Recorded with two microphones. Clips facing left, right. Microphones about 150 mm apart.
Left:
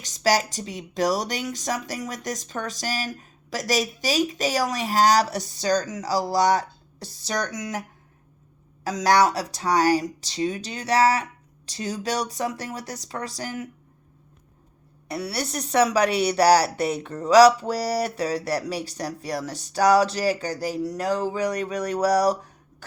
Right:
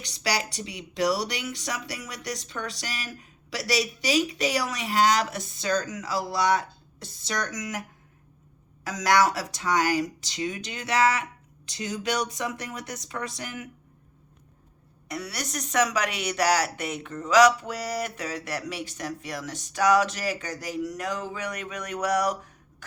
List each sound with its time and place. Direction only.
0.0 s speech: 40° left (ahead or behind)
8.8 s speech: 30° left (ahead or behind)
15.0 s speech: 30° left (ahead or behind)